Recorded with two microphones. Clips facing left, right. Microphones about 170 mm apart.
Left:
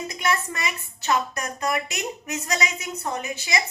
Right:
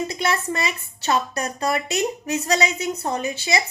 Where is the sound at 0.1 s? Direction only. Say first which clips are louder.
Right 3 dB; 30° right (ahead or behind).